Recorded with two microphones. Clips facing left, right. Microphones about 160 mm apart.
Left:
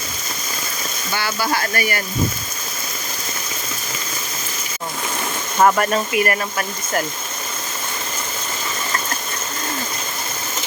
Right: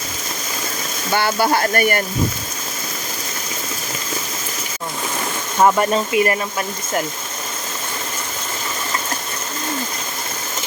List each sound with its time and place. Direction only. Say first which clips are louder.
1.1 s speech: right 5 dB; 55° right (ahead or behind)
5.6 s speech: right 1 dB; 20° right (ahead or behind)